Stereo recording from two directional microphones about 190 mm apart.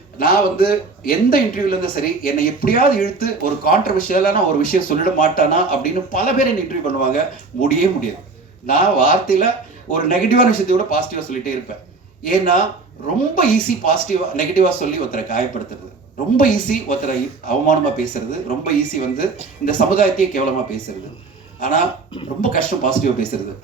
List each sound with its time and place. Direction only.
0.2 s speech: 50° left (ahead or behind)
21.6 s speech: 45° left (ahead or behind)